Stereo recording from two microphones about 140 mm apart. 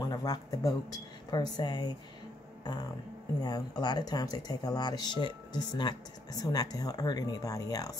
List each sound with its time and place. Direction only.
0.1 s speech: 25° left (ahead or behind)
3.4 s speech: 30° left (ahead or behind)